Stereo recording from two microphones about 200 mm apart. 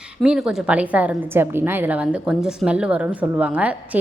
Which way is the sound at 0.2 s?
5° right (ahead or behind).